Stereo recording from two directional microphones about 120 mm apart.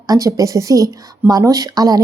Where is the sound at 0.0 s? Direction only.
30° right (ahead or behind).